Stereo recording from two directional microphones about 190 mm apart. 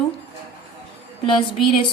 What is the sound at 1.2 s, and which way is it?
Speech, 25° left (ahead or behind).